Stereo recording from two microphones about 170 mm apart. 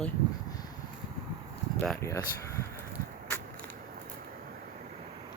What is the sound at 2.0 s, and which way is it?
Speech, 15° left (ahead or behind).